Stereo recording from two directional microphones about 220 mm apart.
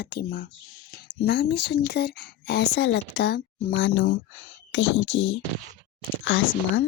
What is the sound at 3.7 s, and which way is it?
A woman's voice, 60° left (ahead or behind).